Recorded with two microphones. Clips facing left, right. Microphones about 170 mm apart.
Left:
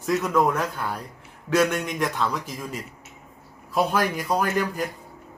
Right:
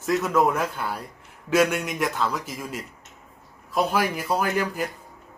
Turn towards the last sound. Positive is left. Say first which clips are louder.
# even
turn(degrees=-5)  # may be behind; listen again after turning